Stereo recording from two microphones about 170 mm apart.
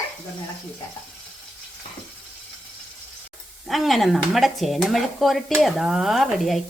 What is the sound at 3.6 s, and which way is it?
Speech, centre (ahead or behind).